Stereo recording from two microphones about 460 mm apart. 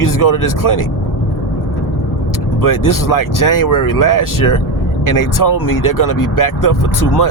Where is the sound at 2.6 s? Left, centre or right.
Left.